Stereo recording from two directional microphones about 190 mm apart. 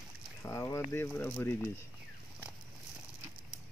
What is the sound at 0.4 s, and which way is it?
Speech, 15° left (ahead or behind).